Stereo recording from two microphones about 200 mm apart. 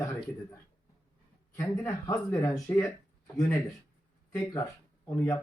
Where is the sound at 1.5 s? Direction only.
15° left (ahead or behind).